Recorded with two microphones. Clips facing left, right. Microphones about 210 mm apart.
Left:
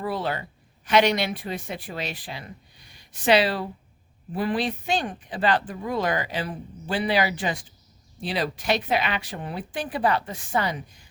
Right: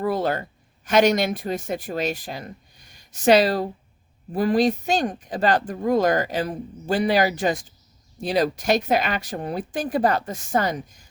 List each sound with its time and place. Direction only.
0.0 s speech: 45° right (ahead or behind)